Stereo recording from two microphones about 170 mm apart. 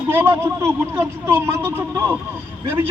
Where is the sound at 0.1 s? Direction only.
15° right (ahead or behind).